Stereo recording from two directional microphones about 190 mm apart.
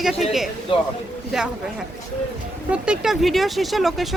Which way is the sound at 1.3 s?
Centre (ahead or behind).